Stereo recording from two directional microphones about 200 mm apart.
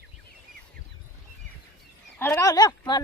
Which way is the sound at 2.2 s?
10° left (ahead or behind).